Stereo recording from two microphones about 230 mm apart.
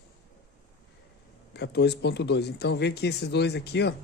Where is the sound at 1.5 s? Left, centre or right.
Left.